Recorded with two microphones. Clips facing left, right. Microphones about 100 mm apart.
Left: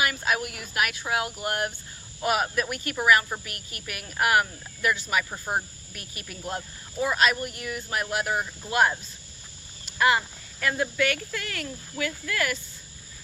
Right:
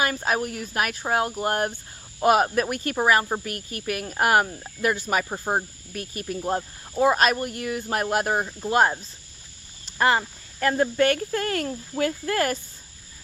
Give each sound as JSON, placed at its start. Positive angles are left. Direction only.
{"t": 0.0, "sound": "speech", "side_deg": -40}
{"t": 10.0, "sound": "speech", "side_deg": -35}